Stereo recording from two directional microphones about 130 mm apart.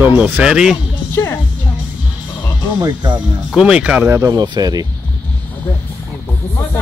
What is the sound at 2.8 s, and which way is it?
Speech, 35° right (ahead or behind).